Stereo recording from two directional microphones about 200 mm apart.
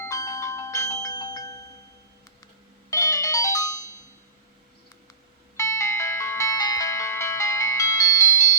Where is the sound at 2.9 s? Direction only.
15° left (ahead or behind).